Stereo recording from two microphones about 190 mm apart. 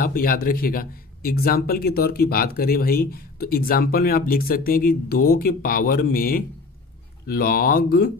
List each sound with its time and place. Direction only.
0.0 s speech: 50° left (ahead or behind)